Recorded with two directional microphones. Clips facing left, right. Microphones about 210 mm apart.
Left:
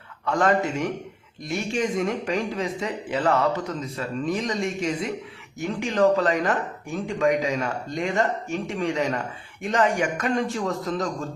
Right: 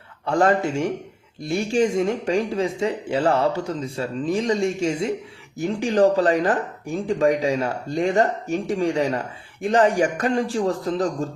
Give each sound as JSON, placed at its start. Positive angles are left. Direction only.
{"t": 0.3, "sound": "speech", "side_deg": -30}